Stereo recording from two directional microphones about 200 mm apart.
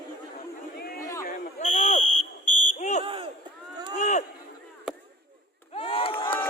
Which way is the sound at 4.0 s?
40° left (ahead or behind).